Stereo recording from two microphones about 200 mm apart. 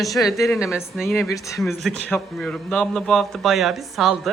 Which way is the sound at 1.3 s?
15° left (ahead or behind).